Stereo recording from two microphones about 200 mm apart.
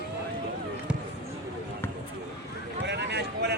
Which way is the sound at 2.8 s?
60° right (ahead or behind).